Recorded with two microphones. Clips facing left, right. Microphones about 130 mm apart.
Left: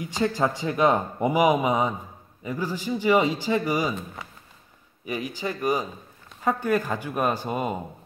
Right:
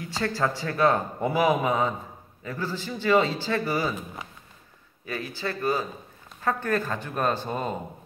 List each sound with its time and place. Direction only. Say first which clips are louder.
0.0 s a man's voice: left 3 dB; 15° left (ahead or behind)
5.0 s a man's voice: left 2 dB; 15° left (ahead or behind)